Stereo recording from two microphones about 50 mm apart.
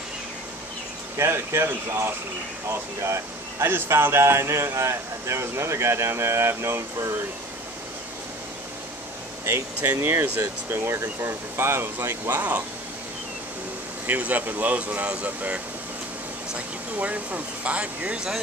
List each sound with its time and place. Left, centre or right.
1.1 s speech: right
2.7 s speech: right
10.0 s speech: right
10.7 s speech: right
11.5 s speech: right
14.0 s speech: right